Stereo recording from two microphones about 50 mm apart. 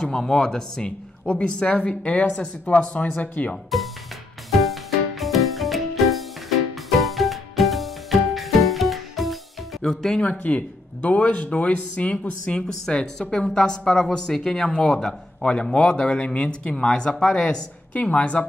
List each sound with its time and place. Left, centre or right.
0.0 s a woman's voice: centre
1.2 s speech: left
4.5 s music: centre
9.8 s a woman's voice: centre
10.2 s a woman's voice: left